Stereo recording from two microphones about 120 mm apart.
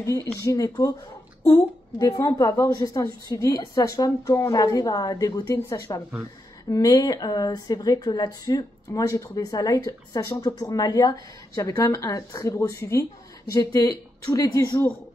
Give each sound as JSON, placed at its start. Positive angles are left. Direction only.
{"t": 0.0, "sound": "a woman's voice", "side_deg": 25}